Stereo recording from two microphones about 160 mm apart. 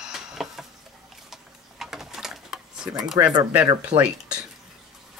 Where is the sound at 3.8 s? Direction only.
5° right (ahead or behind).